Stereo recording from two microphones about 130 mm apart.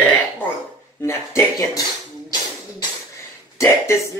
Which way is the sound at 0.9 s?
20° left (ahead or behind).